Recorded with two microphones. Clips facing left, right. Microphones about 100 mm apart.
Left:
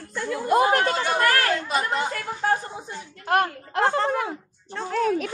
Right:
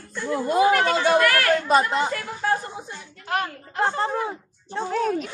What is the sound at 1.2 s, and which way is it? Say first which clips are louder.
Speech: right 1 dB; 35° left (ahead or behind).